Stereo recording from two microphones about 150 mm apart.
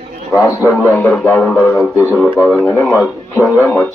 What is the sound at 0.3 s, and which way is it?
Speech, 20° left (ahead or behind).